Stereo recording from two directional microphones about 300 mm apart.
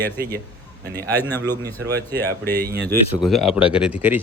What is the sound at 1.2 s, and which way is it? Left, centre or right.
Speech, centre.